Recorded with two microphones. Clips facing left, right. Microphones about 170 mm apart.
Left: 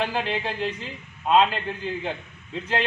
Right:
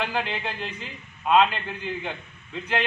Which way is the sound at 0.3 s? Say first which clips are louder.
Left 5 dB; 30° left (ahead or behind).